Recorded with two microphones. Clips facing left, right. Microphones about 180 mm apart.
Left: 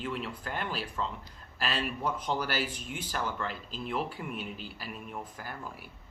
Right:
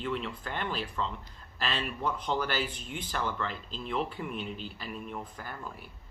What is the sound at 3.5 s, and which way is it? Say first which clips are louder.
Speech: even; 5° left (ahead or behind).